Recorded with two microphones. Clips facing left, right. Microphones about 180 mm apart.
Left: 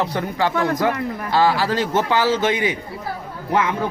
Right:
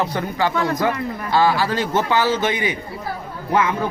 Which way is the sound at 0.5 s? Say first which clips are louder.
Left 1 dB; 55° left (ahead or behind).